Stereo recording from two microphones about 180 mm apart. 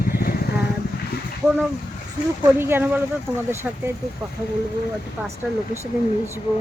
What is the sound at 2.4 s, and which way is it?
Speech, 10° right (ahead or behind).